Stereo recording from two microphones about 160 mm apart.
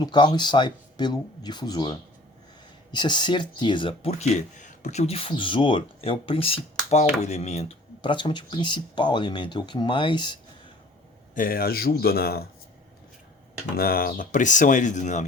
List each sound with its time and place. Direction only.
0.0 s speech: 30° left (ahead or behind)
11.3 s speech: 65° left (ahead or behind)
13.7 s speech: 70° left (ahead or behind); by 15.2 s 50° left (ahead or behind)